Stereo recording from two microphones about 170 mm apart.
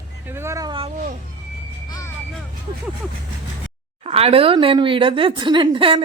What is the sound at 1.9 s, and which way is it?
Vehicle, 20° left (ahead or behind).